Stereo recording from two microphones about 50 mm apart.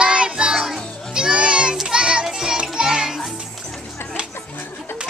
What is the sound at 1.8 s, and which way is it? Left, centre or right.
Child singing, centre.